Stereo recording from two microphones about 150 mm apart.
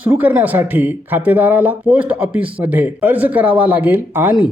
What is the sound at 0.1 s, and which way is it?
Speech, 10° right (ahead or behind).